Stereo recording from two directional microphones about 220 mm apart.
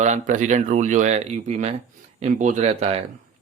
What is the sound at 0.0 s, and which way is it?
Speech, 35° right (ahead or behind).